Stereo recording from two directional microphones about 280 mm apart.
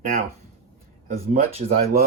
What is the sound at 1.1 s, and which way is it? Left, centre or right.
Speech, right.